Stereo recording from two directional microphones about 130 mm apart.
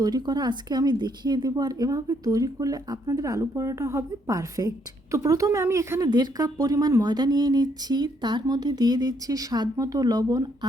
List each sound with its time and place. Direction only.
0.0 s speech: 30° right (ahead or behind)
6.1 s speech: 35° right (ahead or behind)